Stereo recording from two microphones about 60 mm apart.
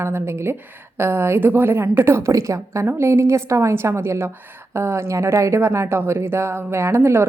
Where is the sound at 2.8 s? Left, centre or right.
Right.